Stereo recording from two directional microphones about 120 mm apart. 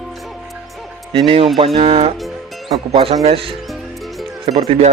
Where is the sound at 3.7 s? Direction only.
Centre (ahead or behind).